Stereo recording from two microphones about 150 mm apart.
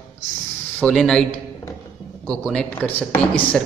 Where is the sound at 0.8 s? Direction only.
5° left (ahead or behind).